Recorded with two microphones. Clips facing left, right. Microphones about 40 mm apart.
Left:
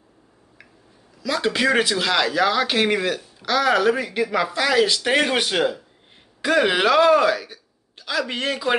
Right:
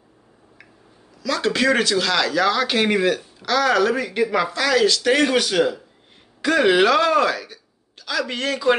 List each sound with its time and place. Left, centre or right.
1.2 s speech: centre
6.4 s speech: centre